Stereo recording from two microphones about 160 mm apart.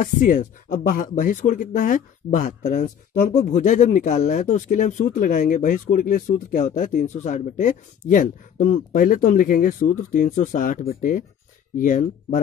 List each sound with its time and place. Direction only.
0.0 s speech: 55° left (ahead or behind)